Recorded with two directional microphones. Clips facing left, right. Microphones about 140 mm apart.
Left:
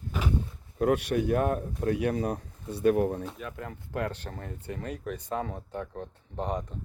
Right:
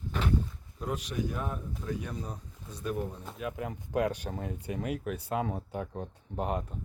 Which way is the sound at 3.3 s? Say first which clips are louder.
Right 2 dB; centre (ahead or behind).